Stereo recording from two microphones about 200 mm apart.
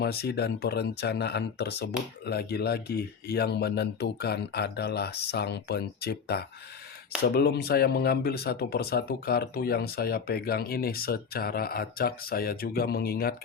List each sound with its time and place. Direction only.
0.0 s speech: 50° left (ahead or behind)